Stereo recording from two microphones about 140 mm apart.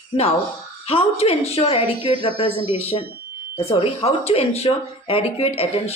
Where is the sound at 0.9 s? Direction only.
45° left (ahead or behind).